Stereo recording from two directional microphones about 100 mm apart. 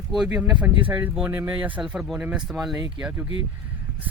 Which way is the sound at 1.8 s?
5° right (ahead or behind).